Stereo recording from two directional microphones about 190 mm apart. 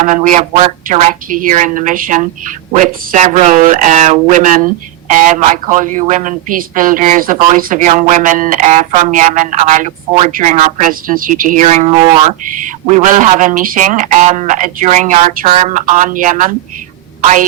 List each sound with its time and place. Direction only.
0.0 s speech: 40° right (ahead or behind)